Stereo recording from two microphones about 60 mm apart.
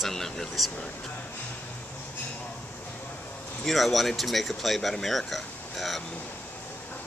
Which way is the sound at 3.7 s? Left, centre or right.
Centre.